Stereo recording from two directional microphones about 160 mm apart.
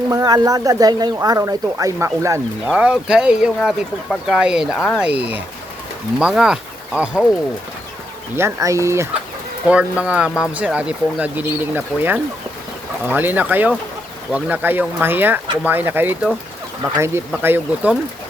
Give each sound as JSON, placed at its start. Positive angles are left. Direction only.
{"t": 0.1, "sound": "speech", "side_deg": -25}
{"t": 2.6, "sound": "speech", "side_deg": -5}
{"t": 6.1, "sound": "speech", "side_deg": -5}
{"t": 8.4, "sound": "speech", "side_deg": -15}